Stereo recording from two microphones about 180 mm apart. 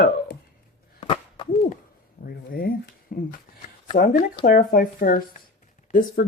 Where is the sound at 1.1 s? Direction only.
30° left (ahead or behind).